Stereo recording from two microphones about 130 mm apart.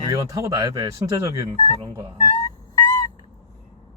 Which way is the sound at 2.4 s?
30° left (ahead or behind).